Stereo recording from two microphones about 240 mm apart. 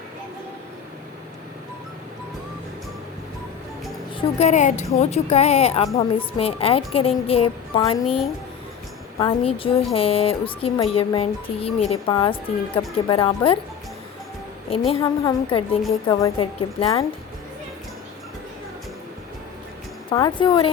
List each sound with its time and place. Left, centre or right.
4.1 s a woman's voice: left
9.1 s a woman's voice: centre
14.7 s a woman's voice: centre
20.1 s a woman's voice: centre